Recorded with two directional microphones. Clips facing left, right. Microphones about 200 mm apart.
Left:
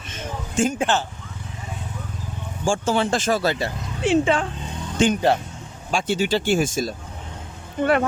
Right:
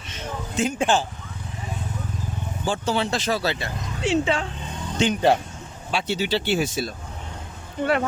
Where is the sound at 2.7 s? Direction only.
50° left (ahead or behind).